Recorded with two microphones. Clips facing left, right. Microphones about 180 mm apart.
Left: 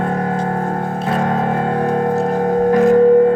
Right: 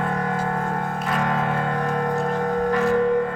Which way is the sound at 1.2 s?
40° left (ahead or behind).